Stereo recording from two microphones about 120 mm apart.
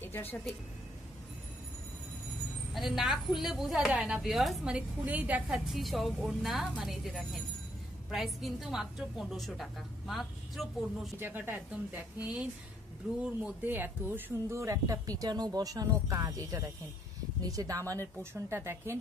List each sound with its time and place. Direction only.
0.0 s speech: 15° left (ahead or behind)
2.7 s a woman's voice: centre (ahead or behind)
5.7 s a woman's voice: centre (ahead or behind)
11.1 s a woman's voice: 20° right (ahead or behind)